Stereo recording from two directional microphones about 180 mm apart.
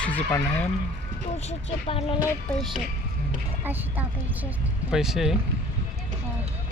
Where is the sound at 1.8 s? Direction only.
30° left (ahead or behind).